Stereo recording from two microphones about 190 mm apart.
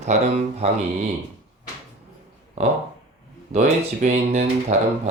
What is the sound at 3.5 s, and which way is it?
Speech, 35° right (ahead or behind).